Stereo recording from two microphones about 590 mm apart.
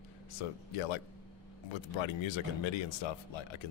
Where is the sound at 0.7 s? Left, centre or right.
Left.